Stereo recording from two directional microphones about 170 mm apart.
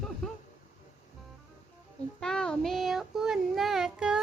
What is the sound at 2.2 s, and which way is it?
Child singing, 5° left (ahead or behind).